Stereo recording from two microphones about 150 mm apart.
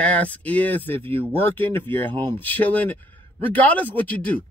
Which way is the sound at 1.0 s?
35° right (ahead or behind).